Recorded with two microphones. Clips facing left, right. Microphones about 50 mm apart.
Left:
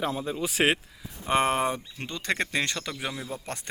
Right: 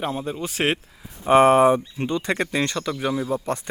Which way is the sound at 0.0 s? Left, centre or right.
Right.